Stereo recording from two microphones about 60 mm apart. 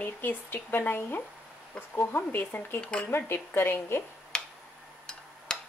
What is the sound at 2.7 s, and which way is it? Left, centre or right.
Speech, centre.